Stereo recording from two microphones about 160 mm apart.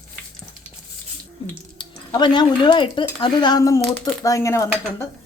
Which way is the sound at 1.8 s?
30° left (ahead or behind).